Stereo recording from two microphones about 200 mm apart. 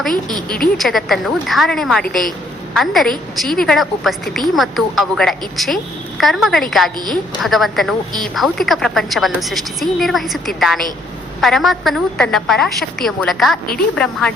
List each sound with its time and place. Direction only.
0.3 s a woman's voice: 20° right (ahead or behind)
0.8 s a woman's voice: centre (ahead or behind)